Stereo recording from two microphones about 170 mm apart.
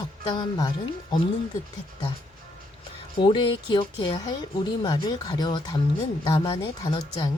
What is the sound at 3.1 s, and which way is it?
Speech, 30° left (ahead or behind).